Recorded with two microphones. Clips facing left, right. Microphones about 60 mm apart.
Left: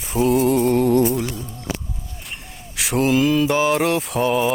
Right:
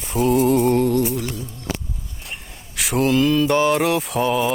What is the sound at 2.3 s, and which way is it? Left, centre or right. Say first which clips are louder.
Mantra: right 1 dB; centre.